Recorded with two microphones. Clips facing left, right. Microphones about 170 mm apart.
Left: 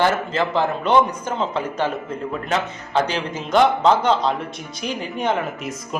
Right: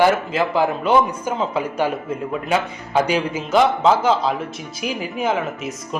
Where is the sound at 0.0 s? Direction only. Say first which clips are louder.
Right 3 dB; 10° right (ahead or behind).